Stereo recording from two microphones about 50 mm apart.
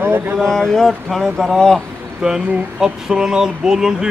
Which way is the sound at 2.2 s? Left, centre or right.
Centre.